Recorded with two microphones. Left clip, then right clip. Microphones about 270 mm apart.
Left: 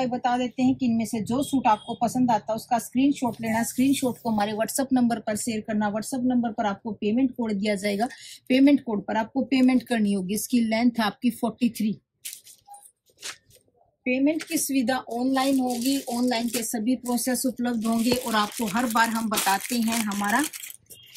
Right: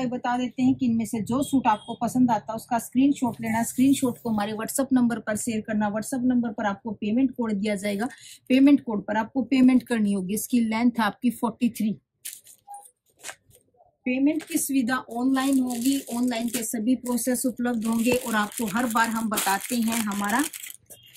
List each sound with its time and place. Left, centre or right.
0.6 s speech: centre
14.0 s speech: centre
19.7 s speech: centre